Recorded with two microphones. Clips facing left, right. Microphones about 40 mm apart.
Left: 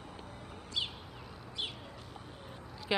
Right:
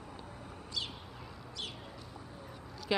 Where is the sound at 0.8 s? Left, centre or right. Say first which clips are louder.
Left 3 dB; left.